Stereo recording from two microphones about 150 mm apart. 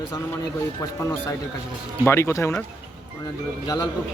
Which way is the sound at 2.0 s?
15° left (ahead or behind).